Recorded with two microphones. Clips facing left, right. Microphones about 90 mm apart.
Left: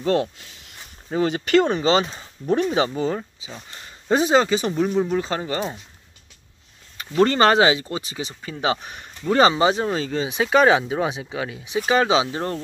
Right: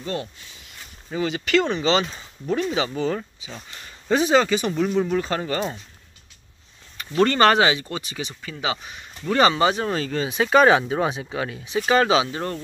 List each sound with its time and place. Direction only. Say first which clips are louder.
0.0 s speech: left 8 dB; 75° left (ahead or behind)
1.1 s speech: left 3 dB; 40° left (ahead or behind)
2.9 s speech: left 1 dB; 15° left (ahead or behind)
3.7 s speech: left 1 dB; 30° left (ahead or behind)
4.7 s speech: even; 15° left (ahead or behind)
7.0 s speech: left 1 dB; 25° left (ahead or behind); by 9.1 s 45° left (ahead or behind)
9.3 s speech: left 2 dB; 25° left (ahead or behind)
9.8 s speech: left 1 dB; 15° left (ahead or behind)
12.1 s speech: left 1 dB; 25° left (ahead or behind)